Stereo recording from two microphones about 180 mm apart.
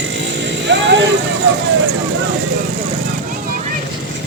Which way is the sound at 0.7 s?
80° right.